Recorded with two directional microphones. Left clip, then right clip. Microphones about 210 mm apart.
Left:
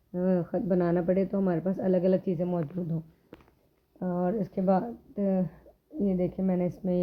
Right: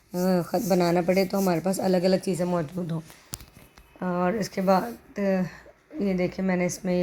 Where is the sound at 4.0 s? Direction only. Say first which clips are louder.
Right 4 dB; 20° right (ahead or behind).